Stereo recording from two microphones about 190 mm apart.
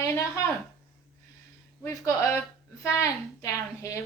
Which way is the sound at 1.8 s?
15° left (ahead or behind).